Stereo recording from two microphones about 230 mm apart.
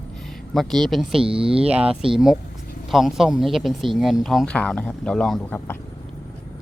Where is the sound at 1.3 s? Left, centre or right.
Right.